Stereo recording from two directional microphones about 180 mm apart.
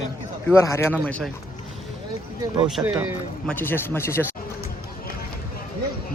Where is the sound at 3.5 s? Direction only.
10° left (ahead or behind).